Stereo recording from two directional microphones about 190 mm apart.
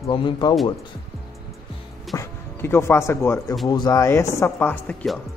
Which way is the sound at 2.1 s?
15° left (ahead or behind).